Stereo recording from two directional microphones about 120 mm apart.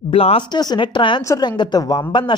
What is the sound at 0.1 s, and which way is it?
Speech, 55° left (ahead or behind).